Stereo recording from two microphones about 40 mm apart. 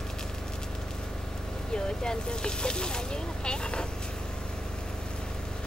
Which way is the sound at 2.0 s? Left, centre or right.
Left.